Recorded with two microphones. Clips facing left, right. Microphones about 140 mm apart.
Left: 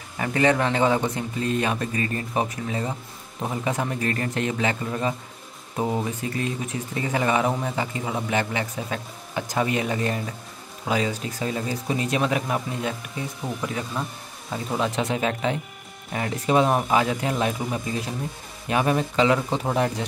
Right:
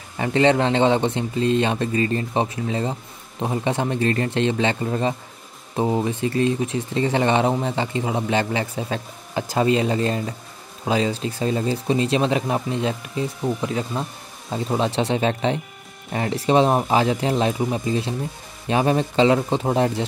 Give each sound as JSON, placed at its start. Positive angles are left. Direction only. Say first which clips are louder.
{"t": 0.2, "sound": "a man's voice", "louder": "right 3 dB", "side_deg": -25}
{"t": 18.7, "sound": "a man's voice", "louder": "right 3 dB", "side_deg": -30}